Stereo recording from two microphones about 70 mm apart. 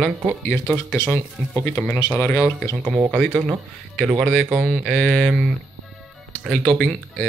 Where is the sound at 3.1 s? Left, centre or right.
Centre.